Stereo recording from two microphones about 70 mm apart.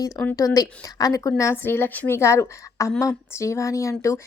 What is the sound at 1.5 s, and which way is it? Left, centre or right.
A woman's voice, left.